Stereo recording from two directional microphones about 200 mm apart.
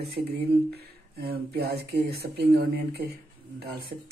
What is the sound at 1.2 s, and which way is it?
Speech, 50° right (ahead or behind).